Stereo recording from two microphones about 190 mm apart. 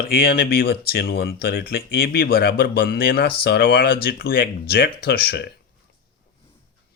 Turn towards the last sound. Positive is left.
turn(degrees=55)  # may be behind; listen again after turning